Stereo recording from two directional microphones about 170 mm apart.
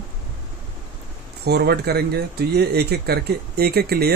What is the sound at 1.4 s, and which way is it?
Speech, 70° right (ahead or behind).